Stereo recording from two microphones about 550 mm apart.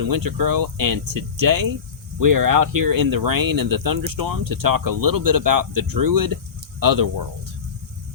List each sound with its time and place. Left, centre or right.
0.0 s speech: right